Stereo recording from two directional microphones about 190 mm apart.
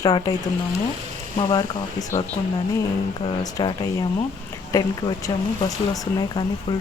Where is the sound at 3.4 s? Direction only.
20° left (ahead or behind).